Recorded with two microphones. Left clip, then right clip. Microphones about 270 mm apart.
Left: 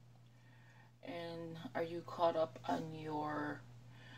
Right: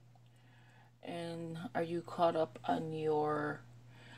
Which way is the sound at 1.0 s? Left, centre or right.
Right.